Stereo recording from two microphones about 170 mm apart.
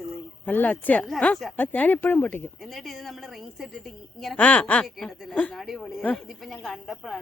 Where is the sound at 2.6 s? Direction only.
Centre (ahead or behind).